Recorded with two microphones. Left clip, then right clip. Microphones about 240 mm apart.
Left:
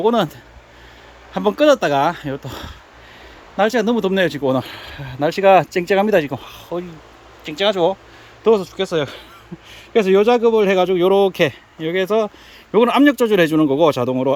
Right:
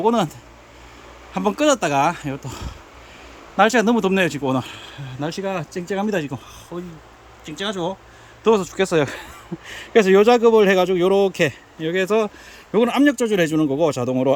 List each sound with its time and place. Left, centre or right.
0.0 s speech: centre
1.3 s speech: centre
8.4 s speech: centre